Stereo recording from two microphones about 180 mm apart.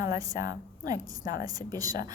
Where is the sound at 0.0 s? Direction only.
20° right (ahead or behind).